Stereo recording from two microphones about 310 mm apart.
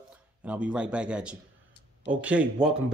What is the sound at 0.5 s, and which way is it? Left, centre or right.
Speech, centre.